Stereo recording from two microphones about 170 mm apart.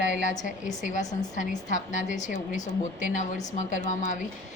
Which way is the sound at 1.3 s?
45° left (ahead or behind).